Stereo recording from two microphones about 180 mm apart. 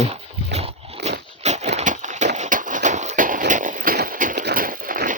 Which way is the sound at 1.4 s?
40° right (ahead or behind).